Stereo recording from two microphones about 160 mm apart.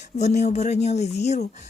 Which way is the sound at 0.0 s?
45° left (ahead or behind).